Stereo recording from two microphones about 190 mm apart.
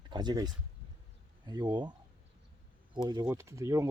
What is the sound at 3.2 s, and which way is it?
Speech, 15° right (ahead or behind).